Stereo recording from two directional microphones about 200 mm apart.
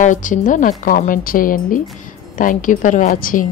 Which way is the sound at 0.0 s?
40° left (ahead or behind).